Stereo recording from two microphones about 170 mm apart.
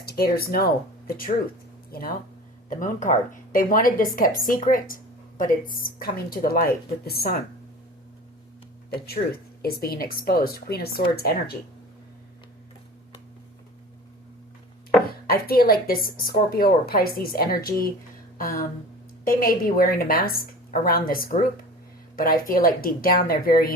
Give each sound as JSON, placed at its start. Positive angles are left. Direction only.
{"t": 0.0, "sound": "a woman's voice", "side_deg": 60}
{"t": 9.0, "sound": "a woman's voice", "side_deg": 65}
{"t": 15.3, "sound": "a woman's voice", "side_deg": 60}
{"t": 18.3, "sound": "a sound", "side_deg": 55}
{"t": 19.2, "sound": "a woman's voice", "side_deg": 60}